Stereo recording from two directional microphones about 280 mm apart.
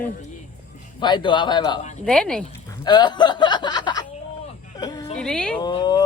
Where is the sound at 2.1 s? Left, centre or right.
Centre.